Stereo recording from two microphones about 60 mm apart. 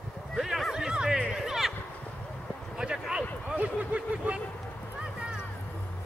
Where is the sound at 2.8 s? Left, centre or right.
Centre.